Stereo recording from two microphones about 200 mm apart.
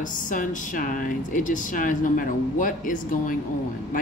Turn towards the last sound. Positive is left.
turn(degrees=40)  # may be behind; listen again after turning